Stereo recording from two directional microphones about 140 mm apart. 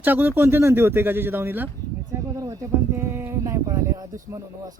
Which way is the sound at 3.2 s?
20° right (ahead or behind).